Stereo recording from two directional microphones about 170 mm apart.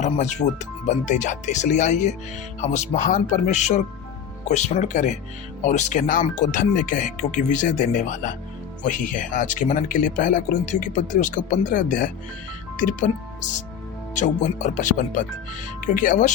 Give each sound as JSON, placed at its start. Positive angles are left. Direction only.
{"t": 0.0, "sound": "speech", "side_deg": 45}
{"t": 14.2, "sound": "speech", "side_deg": 45}